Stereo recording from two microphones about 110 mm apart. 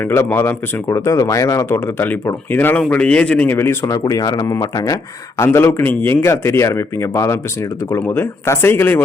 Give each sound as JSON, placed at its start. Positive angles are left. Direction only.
{"t": 0.1, "sound": "speech", "side_deg": 25}